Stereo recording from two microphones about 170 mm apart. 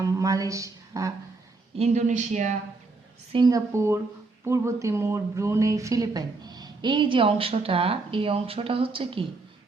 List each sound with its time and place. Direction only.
0.0 s a woman's voice: 20° right (ahead or behind)
1.7 s speech: 40° right (ahead or behind)
3.3 s a woman's voice: 25° right (ahead or behind)